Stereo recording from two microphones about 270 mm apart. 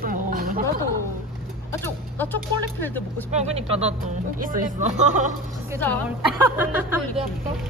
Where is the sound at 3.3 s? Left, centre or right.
Right.